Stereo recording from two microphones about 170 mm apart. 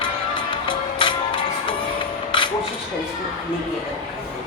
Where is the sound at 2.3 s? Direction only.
30° left (ahead or behind).